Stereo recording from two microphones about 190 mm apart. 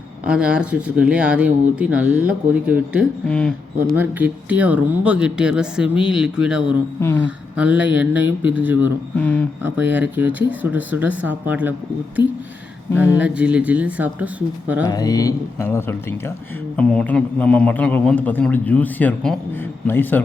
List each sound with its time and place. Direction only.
0.3 s speech: 5° right (ahead or behind)
3.2 s a man's voice: 5° left (ahead or behind)
3.9 s speech: 10° right (ahead or behind)
9.1 s a man's voice: 10° left (ahead or behind)
9.6 s speech: 10° right (ahead or behind)
13.0 s speech: 5° right (ahead or behind)
14.8 s a man's voice: 20° left (ahead or behind)